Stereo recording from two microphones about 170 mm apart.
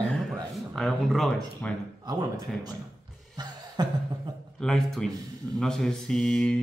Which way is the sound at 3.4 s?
25° right (ahead or behind).